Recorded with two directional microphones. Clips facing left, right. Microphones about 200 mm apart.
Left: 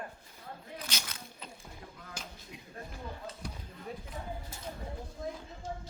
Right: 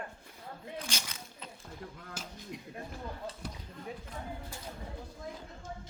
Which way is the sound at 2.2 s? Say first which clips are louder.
Right 1 dB; 5° right (ahead or behind).